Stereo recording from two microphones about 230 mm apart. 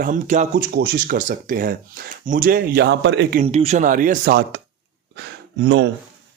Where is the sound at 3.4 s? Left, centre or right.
Right.